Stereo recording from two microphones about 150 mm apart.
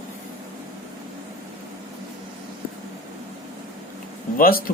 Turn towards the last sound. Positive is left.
turn(degrees=75)  # may be behind; listen again after turning